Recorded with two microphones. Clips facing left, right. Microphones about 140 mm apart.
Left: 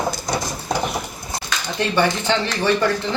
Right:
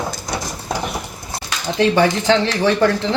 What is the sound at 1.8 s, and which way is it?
Speech, 90° right.